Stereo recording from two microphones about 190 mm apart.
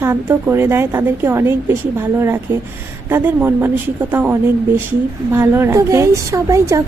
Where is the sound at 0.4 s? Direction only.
10° right (ahead or behind).